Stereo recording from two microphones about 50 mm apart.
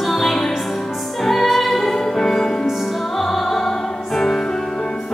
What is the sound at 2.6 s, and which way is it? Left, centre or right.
Music, centre.